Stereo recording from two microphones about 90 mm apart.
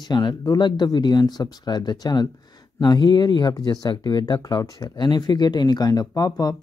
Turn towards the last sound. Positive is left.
turn(degrees=45)  # may be behind; listen again after turning